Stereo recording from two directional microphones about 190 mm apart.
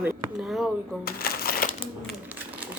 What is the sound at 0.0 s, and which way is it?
Speech, 5° right (ahead or behind).